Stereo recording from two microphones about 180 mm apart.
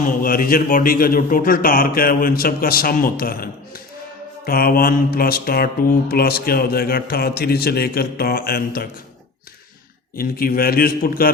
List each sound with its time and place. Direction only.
0.0 s a man's voice: 50° left (ahead or behind)
4.4 s mantra: 55° left (ahead or behind)
10.2 s mantra: 55° left (ahead or behind)